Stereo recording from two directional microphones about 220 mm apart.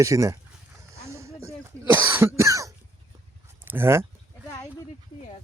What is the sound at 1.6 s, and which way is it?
Cough, 10° right (ahead or behind).